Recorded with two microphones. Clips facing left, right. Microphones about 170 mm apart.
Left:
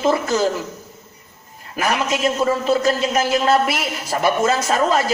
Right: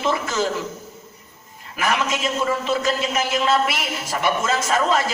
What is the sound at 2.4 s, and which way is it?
A man's voice, 40° left (ahead or behind).